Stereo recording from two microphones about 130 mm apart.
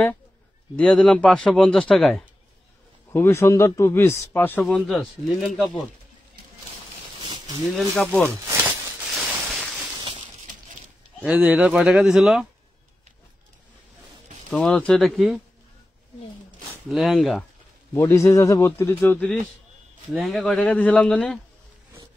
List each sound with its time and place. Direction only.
0.7 s speech: 10° left (ahead or behind)
3.1 s speech: 20° left (ahead or behind)
7.9 s speech: 10° left (ahead or behind)
8.3 s a sound: 20° right (ahead or behind)
9.1 s a sound: centre (ahead or behind)
11.2 s speech: 10° right (ahead or behind)
14.5 s speech: 10° left (ahead or behind)
16.9 s speech: centre (ahead or behind)
17.9 s a man's voice: 20° left (ahead or behind)
20.1 s speech: centre (ahead or behind)